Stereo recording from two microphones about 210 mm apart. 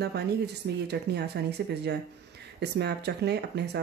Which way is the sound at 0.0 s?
50° right (ahead or behind).